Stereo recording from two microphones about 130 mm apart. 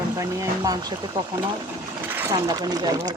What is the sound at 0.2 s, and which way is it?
Speech, 30° right (ahead or behind).